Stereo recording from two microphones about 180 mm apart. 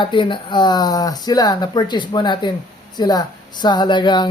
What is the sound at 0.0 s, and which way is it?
Speech, 25° left (ahead or behind).